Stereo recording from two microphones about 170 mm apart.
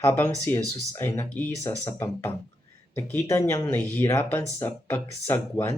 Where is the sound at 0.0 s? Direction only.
15° left (ahead or behind).